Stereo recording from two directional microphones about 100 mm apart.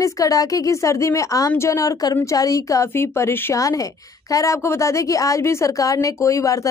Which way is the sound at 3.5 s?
35° left (ahead or behind).